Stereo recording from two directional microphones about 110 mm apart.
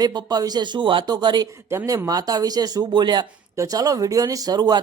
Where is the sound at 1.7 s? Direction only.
25° right (ahead or behind).